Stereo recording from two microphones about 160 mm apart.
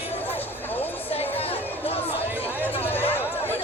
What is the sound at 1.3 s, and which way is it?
Music, 35° left (ahead or behind).